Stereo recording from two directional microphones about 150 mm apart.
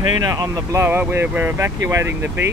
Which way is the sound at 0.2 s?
25° right (ahead or behind).